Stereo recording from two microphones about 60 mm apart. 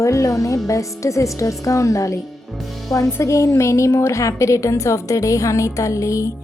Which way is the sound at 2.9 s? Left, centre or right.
Left.